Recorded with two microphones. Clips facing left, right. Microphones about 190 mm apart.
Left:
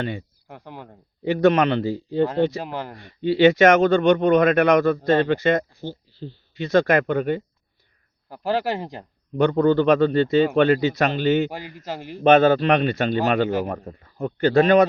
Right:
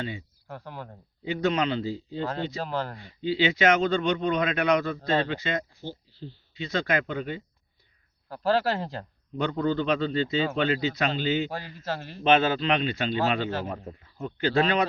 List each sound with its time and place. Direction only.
0.0 s speech: 60° left (ahead or behind)
0.4 s speech: 15° left (ahead or behind)
1.2 s speech: 60° left (ahead or behind)
2.6 s speech: 15° left (ahead or behind)
3.0 s speech: 60° left (ahead or behind)
5.8 s speech: 70° left (ahead or behind)
8.3 s speech: 15° left (ahead or behind)
9.4 s speech: 60° left (ahead or behind)
11.8 s speech: 15° left (ahead or behind)
12.2 s speech: 45° left (ahead or behind)